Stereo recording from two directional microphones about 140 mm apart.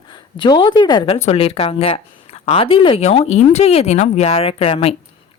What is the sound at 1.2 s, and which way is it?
A woman's voice, 45° left (ahead or behind).